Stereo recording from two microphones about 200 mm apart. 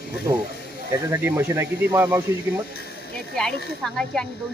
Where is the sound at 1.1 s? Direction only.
10° right (ahead or behind).